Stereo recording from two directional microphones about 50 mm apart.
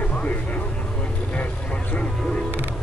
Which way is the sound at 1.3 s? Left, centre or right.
Left.